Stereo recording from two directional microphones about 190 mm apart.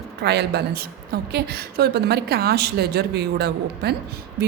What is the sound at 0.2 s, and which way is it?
A woman's voice, 60° right (ahead or behind).